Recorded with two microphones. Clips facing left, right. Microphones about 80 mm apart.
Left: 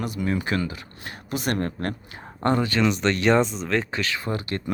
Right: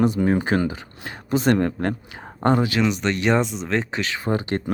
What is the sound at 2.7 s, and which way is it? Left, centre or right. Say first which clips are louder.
Speech: even; centre.